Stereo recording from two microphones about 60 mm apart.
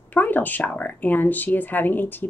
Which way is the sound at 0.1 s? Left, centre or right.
Left.